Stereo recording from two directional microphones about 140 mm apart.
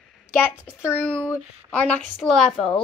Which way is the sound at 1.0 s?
5° left (ahead or behind).